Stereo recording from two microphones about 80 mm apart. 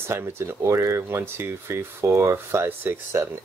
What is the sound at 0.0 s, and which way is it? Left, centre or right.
Speech, right.